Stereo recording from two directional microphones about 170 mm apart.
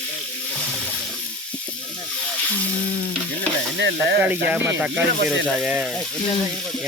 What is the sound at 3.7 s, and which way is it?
Snake, 90° right.